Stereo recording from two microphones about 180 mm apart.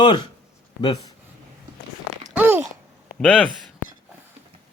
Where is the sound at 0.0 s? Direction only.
25° left (ahead or behind).